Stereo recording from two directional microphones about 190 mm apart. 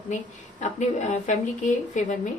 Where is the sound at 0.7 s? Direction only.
40° left (ahead or behind).